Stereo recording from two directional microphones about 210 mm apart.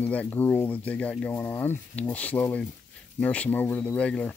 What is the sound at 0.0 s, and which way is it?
Speech, 10° left (ahead or behind).